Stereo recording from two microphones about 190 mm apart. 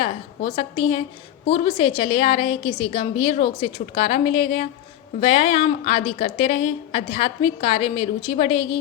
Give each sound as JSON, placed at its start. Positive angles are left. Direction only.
{"t": 0.0, "sound": "a woman's voice", "side_deg": 30}